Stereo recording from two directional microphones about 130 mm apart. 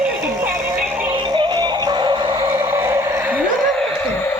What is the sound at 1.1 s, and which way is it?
Synthetic singing, 35° right (ahead or behind).